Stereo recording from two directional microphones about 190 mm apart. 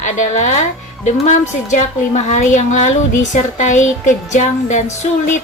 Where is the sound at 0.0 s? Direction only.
40° left (ahead or behind).